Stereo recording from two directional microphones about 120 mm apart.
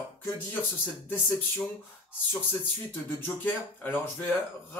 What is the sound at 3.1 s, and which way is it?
Speech, 15° left (ahead or behind).